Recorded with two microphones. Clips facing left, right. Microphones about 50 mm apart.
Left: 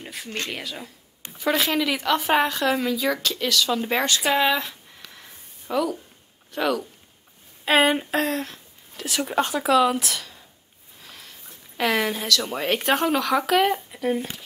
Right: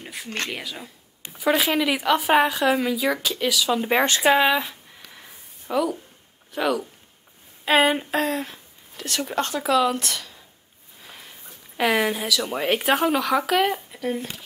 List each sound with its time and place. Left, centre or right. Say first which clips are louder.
0.0 s a sound: even; centre
0.5 s speech: even; centre
4.0 s speech: right 3 dB; right
4.3 s speech: right 3 dB; centre
5.1 s a sound: right 1 dB; centre
6.5 s speech: even; centre
11.0 s speech: right 1 dB; centre